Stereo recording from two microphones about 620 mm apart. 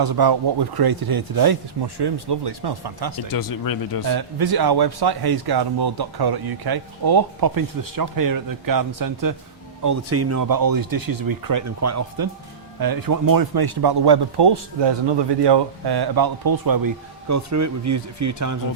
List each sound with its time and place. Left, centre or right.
0.0 s a man's voice: right
3.2 s speech: left
4.0 s a man's voice: right